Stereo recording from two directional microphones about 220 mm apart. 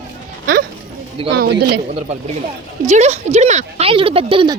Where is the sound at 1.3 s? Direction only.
45° right (ahead or behind).